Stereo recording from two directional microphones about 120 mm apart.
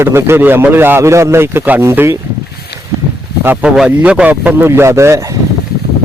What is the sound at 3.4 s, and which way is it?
Speech, 15° right (ahead or behind).